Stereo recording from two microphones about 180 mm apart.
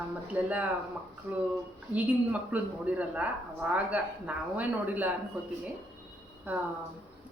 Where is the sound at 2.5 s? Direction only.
5° right (ahead or behind).